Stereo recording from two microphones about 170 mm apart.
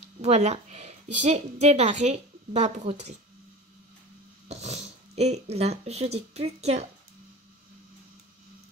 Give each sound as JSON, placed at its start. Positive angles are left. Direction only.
{"t": 0.2, "sound": "speech", "side_deg": -40}
{"t": 4.5, "sound": "speech", "side_deg": -40}